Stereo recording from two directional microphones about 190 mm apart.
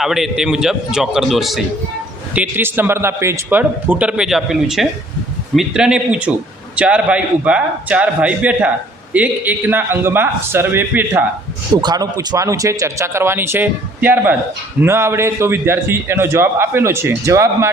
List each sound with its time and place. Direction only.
0.0 s a man's voice: centre (ahead or behind)
11.8 s a man's voice: 20° right (ahead or behind)